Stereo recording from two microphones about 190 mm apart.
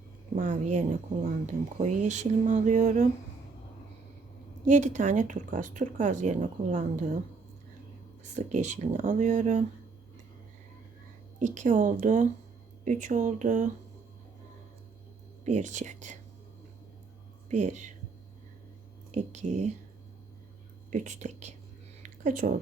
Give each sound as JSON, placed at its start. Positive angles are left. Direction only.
{"t": 0.3, "sound": "speech", "side_deg": -40}
{"t": 4.6, "sound": "speech", "side_deg": -40}
{"t": 8.2, "sound": "speech", "side_deg": -40}
{"t": 11.3, "sound": "speech", "side_deg": -40}
{"t": 15.5, "sound": "speech", "side_deg": -40}
{"t": 17.5, "sound": "speech", "side_deg": -40}
{"t": 19.1, "sound": "speech", "side_deg": -35}
{"t": 20.9, "sound": "speech", "side_deg": -40}
{"t": 22.0, "sound": "a sound", "side_deg": -40}